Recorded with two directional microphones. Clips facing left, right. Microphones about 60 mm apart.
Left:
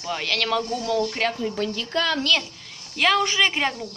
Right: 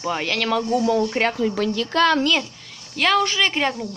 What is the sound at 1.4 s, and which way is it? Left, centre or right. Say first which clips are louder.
Speech: right 5 dB; right.